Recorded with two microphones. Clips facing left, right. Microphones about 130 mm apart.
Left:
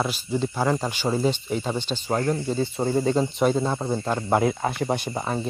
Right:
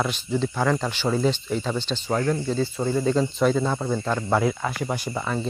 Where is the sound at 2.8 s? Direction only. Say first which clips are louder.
Left 1 dB; 35° left (ahead or behind).